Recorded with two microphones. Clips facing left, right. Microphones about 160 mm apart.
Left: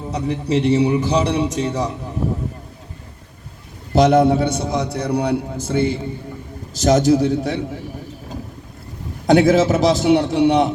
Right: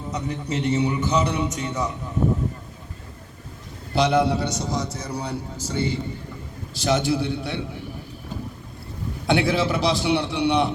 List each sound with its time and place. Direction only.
0.1 s a man's voice: 30° left (ahead or behind)
3.9 s a man's voice: 45° left (ahead or behind)
6.7 s a man's voice: 45° left (ahead or behind)
9.2 s a man's voice: 45° left (ahead or behind)